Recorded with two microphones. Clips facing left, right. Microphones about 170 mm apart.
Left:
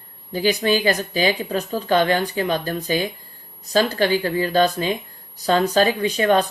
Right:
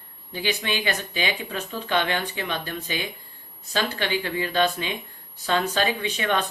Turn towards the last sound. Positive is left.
turn(degrees=35)  # may be behind; listen again after turning